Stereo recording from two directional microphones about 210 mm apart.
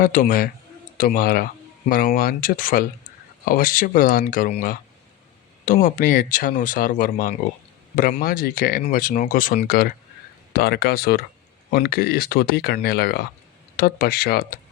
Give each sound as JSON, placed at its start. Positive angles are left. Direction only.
{"t": 0.0, "sound": "speech", "side_deg": 40}
{"t": 5.6, "sound": "speech", "side_deg": 40}